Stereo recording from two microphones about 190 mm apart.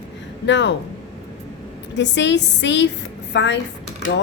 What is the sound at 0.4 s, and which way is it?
Speech, 70° left (ahead or behind).